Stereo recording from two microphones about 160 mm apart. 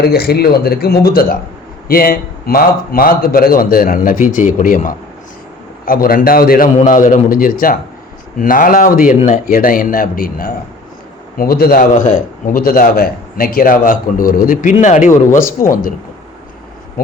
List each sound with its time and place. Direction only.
0.0 s a man's voice: 75° left (ahead or behind)
6.7 s a man's voice: 55° left (ahead or behind)